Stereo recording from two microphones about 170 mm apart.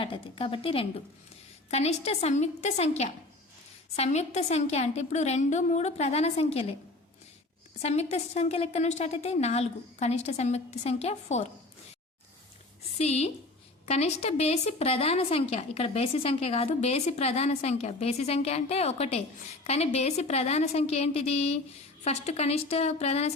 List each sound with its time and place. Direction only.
0.0 s a woman's voice: 30° left (ahead or behind)
7.8 s a woman's voice: 40° left (ahead or behind)
13.0 s a woman's voice: 40° left (ahead or behind)